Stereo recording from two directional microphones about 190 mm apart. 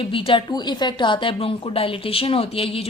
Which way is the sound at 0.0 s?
30° left (ahead or behind).